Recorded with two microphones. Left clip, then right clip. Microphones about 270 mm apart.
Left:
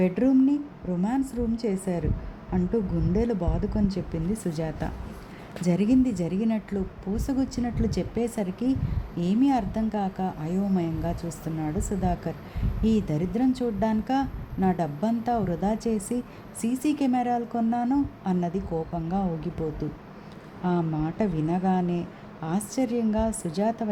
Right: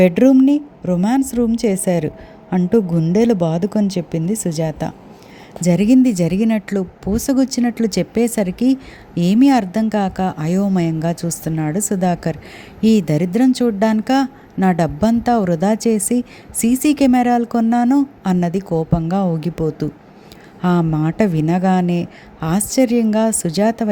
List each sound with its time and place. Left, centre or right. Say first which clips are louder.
0.0 s a woman's voice: right 11 dB; right